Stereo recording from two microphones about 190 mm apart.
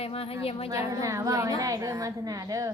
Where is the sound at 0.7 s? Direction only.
15° right (ahead or behind).